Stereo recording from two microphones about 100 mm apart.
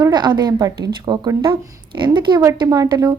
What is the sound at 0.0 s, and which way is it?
Speech, 45° right (ahead or behind).